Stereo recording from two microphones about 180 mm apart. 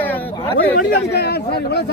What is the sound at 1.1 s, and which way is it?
Speech, 65° left (ahead or behind).